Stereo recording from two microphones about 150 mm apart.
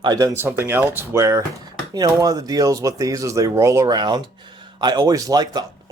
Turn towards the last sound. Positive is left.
turn(degrees=-25)  # may be behind; listen again after turning